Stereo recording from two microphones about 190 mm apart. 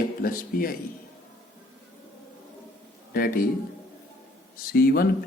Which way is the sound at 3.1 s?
50° left (ahead or behind).